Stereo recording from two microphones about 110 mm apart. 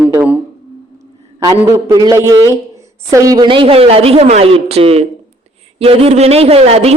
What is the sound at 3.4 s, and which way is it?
A man's voice, 50° right (ahead or behind).